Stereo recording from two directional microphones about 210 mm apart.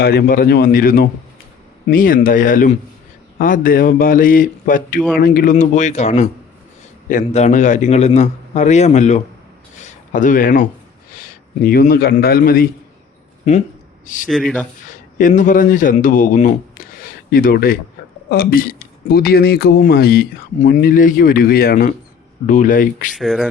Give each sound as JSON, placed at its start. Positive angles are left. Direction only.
{"t": 0.0, "sound": "a man's voice", "side_deg": 50}
{"t": 14.3, "sound": "speech", "side_deg": 0}
{"t": 14.8, "sound": "a man's voice", "side_deg": 40}
{"t": 23.1, "sound": "speech", "side_deg": 0}